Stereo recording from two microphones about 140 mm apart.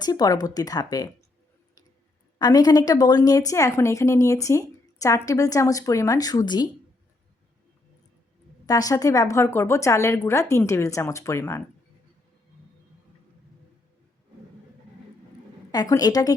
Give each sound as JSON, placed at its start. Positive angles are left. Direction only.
{"t": 0.0, "sound": "a woman's voice", "side_deg": 25}
{"t": 2.4, "sound": "a woman's voice", "side_deg": 25}
{"t": 8.6, "sound": "a woman's voice", "side_deg": 25}
{"t": 15.7, "sound": "a woman's voice", "side_deg": 30}